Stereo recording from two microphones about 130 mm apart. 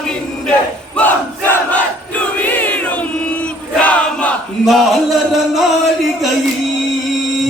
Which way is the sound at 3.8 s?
10° left (ahead or behind).